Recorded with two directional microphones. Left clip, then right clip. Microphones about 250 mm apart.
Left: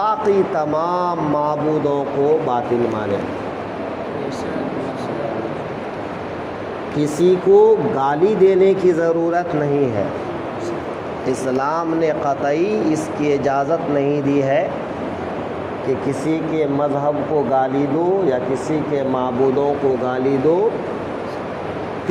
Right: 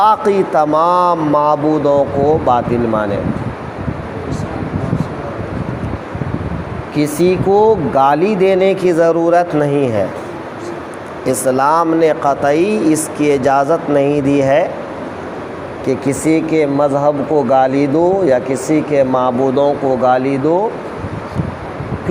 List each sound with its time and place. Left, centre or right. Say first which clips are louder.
0.0 s speech: right 5 dB; right
7.0 s speech: right 2 dB; right
11.3 s speech: right 8 dB; right
16.0 s speech: right 6 dB; right